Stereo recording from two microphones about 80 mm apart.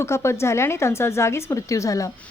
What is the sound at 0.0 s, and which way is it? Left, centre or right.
Speech, left.